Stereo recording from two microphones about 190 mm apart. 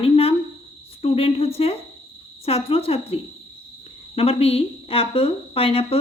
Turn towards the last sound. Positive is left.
turn(degrees=30)  # may be behind; listen again after turning